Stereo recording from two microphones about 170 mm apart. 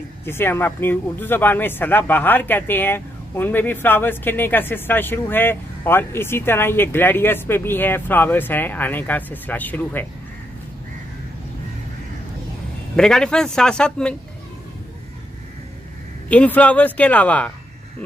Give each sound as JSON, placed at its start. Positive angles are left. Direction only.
{"t": 0.2, "sound": "speech", "side_deg": 15}
{"t": 12.9, "sound": "a man's voice", "side_deg": 5}
{"t": 16.3, "sound": "speech", "side_deg": 10}